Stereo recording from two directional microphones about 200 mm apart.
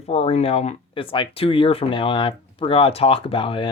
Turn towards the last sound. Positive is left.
turn(degrees=25)  # may be behind; listen again after turning